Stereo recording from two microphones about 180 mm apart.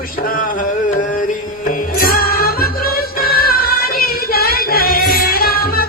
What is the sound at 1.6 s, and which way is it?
Music, 50° left (ahead or behind).